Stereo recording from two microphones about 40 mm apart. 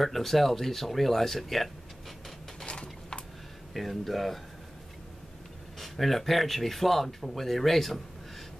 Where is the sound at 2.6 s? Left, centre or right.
Left.